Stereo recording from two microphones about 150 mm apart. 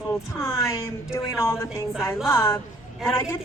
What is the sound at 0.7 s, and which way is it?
A woman's voice, 15° left (ahead or behind).